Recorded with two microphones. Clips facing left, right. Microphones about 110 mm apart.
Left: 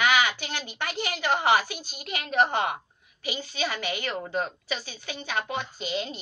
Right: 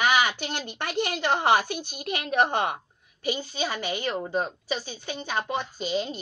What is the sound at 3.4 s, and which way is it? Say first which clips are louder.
A woman's voice: right 1 dB; 35° right (ahead or behind).